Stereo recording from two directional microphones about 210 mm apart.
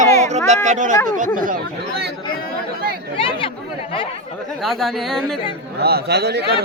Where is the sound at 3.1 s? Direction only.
25° left (ahead or behind).